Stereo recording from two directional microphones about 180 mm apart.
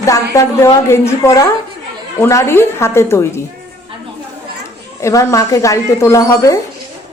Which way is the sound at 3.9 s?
30° right (ahead or behind).